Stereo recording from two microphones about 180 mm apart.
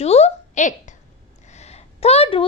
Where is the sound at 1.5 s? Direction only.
35° left (ahead or behind).